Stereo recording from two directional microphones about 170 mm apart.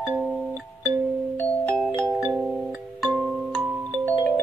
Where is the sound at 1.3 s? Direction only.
5° left (ahead or behind).